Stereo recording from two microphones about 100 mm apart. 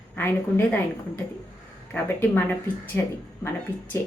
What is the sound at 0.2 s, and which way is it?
A woman's voice, 20° left (ahead or behind).